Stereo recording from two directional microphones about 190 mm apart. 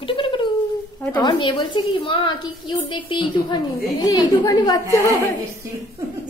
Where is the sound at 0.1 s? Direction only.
25° left (ahead or behind).